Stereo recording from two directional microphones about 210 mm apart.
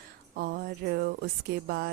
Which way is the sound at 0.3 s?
45° right (ahead or behind).